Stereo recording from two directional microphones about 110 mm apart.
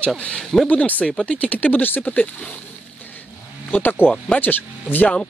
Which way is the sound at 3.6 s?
15° left (ahead or behind).